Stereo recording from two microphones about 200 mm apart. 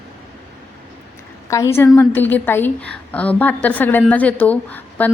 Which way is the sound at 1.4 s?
15° left (ahead or behind).